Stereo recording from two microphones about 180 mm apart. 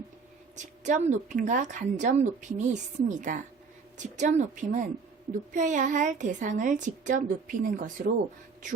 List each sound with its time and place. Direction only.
0.5 s speech: 40° right (ahead or behind)